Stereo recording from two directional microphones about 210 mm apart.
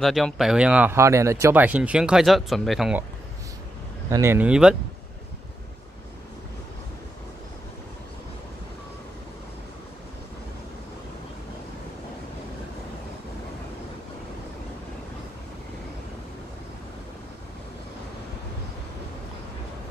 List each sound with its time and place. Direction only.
0.0 s speech: centre (ahead or behind)
4.1 s speech: 10° right (ahead or behind)